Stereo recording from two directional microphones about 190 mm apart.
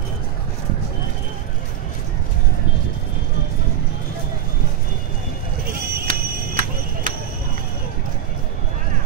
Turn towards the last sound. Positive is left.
turn(degrees=-45)  # may be behind; listen again after turning